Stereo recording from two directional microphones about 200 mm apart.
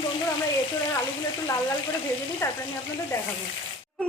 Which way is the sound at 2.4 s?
15° left (ahead or behind).